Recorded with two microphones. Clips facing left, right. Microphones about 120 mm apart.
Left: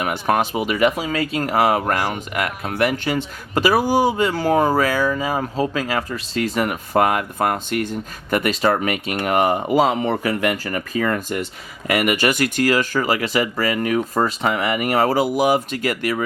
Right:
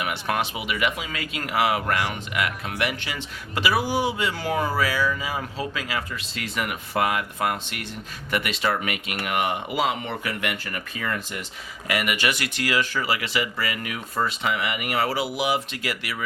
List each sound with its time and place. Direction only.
0.0 s speech: 45° left (ahead or behind)